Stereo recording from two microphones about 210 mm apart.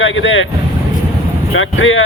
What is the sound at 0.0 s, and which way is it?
Speech, 70° left (ahead or behind).